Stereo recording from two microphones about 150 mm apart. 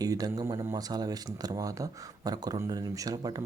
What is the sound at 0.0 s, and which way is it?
Speech, 25° right (ahead or behind).